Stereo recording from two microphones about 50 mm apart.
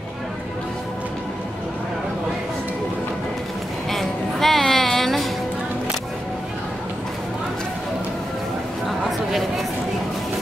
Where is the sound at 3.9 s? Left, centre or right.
Centre.